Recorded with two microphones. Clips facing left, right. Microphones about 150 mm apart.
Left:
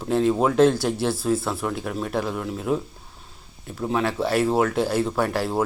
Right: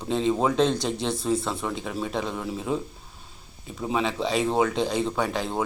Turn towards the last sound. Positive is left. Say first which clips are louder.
# left 3 dB
turn(degrees=5)  # may be behind; listen again after turning